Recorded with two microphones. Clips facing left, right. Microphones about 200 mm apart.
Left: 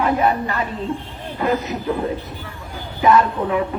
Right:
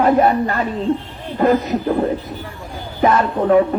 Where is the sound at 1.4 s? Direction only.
50° right (ahead or behind).